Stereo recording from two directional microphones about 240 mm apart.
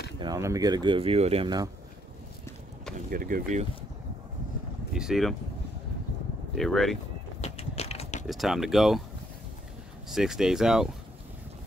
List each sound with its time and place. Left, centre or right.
0.2 s speech: centre
3.1 s speech: right
4.9 s speech: centre
6.5 s speech: centre
7.4 s mechanisms: left
8.3 s speech: centre
10.0 s speech: centre